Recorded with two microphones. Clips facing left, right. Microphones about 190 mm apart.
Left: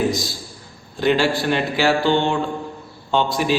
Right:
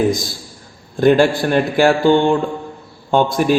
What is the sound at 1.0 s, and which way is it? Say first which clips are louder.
A man's voice: right 6 dB; 50° right (ahead or behind).